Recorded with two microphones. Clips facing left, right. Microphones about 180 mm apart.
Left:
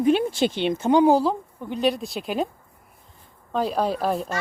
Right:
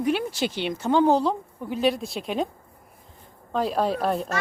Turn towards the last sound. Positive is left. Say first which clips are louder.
# even
turn(degrees=0)  # may be behind; listen again after turning